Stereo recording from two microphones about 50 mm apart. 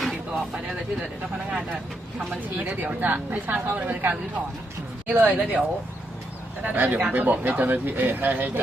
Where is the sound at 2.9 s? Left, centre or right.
Right.